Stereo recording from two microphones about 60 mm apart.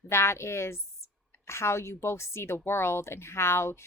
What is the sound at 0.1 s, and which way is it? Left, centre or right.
A woman's voice, left.